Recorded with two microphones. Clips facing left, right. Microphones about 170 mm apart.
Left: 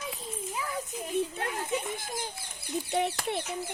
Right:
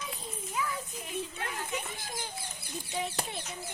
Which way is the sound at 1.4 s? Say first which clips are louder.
Left 5 dB; 40° left (ahead or behind).